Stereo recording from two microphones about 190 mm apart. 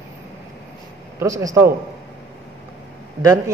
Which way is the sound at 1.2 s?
15° right (ahead or behind).